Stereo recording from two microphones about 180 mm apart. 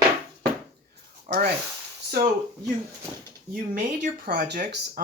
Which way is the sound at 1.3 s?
45° right (ahead or behind).